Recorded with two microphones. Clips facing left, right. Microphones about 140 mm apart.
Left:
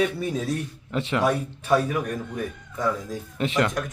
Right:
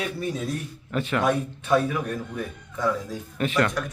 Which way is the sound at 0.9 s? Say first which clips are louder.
Even; 20° left (ahead or behind).